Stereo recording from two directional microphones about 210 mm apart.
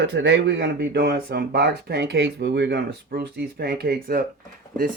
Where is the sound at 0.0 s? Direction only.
60° right (ahead or behind).